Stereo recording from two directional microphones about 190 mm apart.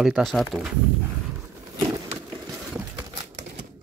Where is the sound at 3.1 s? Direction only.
35° right (ahead or behind).